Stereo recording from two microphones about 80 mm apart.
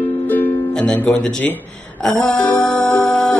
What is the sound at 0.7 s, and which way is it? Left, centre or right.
A man's voice, centre.